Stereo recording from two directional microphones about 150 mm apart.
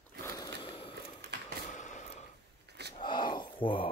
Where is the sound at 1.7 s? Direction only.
55° left (ahead or behind).